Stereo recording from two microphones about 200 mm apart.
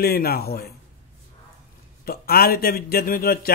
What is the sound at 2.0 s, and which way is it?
A man's voice, 50° left (ahead or behind).